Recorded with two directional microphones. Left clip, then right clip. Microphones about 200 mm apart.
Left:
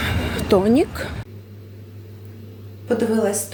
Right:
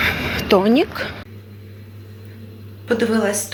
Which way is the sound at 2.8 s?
5° left (ahead or behind).